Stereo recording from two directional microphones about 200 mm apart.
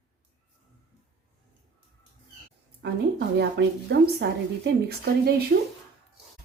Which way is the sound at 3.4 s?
60° right (ahead or behind).